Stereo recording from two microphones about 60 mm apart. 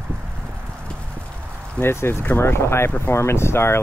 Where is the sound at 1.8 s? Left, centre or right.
Left.